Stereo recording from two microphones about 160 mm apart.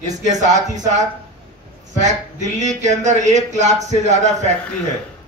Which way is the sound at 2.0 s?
50° right (ahead or behind).